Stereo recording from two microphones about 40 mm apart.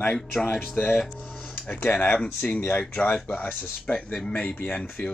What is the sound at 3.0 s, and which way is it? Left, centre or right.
Speech, left.